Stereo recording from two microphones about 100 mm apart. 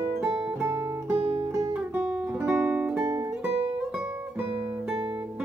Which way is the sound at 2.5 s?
15° right (ahead or behind).